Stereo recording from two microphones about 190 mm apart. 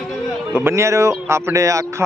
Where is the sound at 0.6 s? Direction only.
15° right (ahead or behind).